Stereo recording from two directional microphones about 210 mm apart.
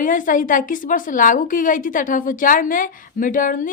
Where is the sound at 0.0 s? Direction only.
40° left (ahead or behind).